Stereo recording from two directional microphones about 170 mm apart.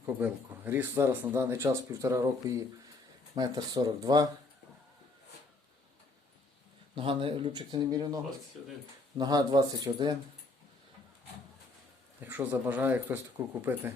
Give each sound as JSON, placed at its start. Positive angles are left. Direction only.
{"t": 0.0, "sound": "speech", "side_deg": -15}
{"t": 6.9, "sound": "speech", "side_deg": -30}
{"t": 12.2, "sound": "speech", "side_deg": -10}